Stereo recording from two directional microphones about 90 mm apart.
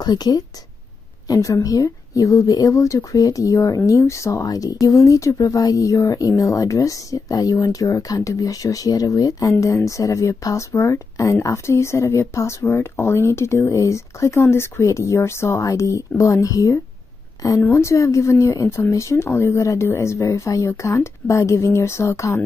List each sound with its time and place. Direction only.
0.0 s a woman's voice: 50° left (ahead or behind)
17.6 s speech: 25° left (ahead or behind)